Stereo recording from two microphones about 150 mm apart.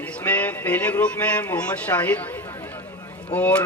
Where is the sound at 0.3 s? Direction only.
10° left (ahead or behind).